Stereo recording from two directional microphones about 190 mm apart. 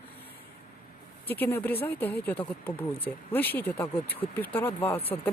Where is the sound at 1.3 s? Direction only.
10° left (ahead or behind).